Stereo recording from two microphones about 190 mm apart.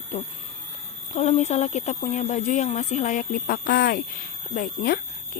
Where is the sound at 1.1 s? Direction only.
35° left (ahead or behind).